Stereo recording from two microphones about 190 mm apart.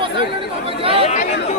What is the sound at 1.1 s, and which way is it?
Chatter, 40° left (ahead or behind).